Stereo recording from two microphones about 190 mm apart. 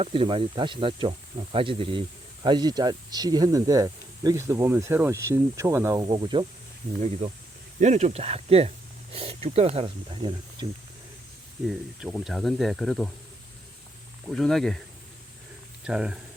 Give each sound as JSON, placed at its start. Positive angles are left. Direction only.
{"t": 0.0, "sound": "speech", "side_deg": -25}
{"t": 7.8, "sound": "speech", "side_deg": -35}
{"t": 11.7, "sound": "speech", "side_deg": -5}
{"t": 14.3, "sound": "speech", "side_deg": 0}
{"t": 15.9, "sound": "speech", "side_deg": -5}